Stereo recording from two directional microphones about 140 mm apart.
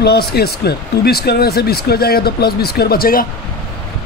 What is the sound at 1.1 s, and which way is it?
Speech, 90° left.